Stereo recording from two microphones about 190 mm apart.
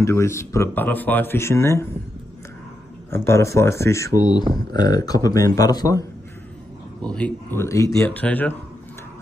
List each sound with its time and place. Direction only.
0.0 s speech: 15° left (ahead or behind)
3.1 s speech: 15° left (ahead or behind)
7.1 s speech: 5° left (ahead or behind)